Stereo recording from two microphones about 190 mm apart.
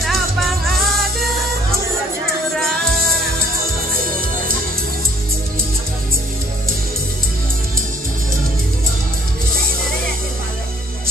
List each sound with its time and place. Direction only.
0.0 s music: centre (ahead or behind)
2.8 s music: 50° right (ahead or behind)